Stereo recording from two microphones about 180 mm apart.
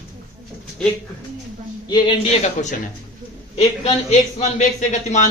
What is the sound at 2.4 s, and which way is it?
A woman's voice, 40° left (ahead or behind).